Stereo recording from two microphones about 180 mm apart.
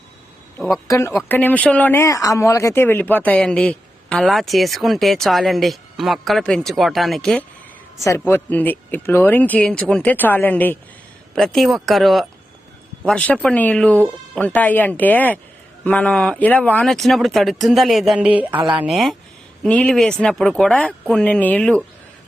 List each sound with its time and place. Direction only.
0.9 s speech: 15° left (ahead or behind)
7.9 s speech: 15° left (ahead or behind); by 18.4 s 5° right (ahead or behind)
18.5 s speech: 25° right (ahead or behind)
18.8 s speech: centre (ahead or behind)